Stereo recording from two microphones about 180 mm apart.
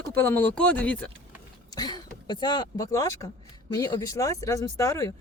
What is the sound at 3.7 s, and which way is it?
Speech, 20° left (ahead or behind).